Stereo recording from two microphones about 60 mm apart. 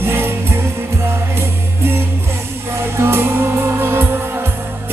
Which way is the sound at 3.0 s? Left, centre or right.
Right.